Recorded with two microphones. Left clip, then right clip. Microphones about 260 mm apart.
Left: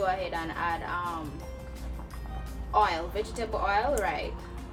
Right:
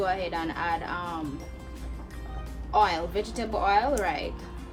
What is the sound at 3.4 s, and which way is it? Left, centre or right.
Speech, centre.